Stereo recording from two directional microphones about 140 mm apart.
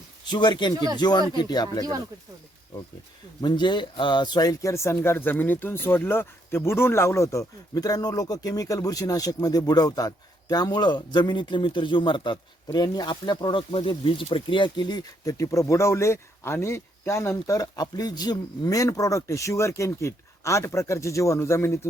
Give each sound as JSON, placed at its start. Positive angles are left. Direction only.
{"t": 0.3, "sound": "speech", "side_deg": 35}
{"t": 3.4, "sound": "speech", "side_deg": 35}